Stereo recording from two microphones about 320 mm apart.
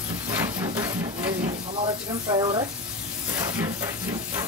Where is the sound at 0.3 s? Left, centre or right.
Centre.